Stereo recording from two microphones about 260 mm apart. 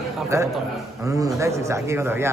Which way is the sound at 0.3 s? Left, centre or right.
Centre.